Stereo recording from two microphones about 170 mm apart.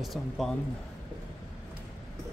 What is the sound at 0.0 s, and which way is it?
Speech, centre (ahead or behind).